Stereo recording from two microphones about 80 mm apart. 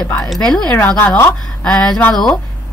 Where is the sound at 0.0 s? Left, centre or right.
Centre.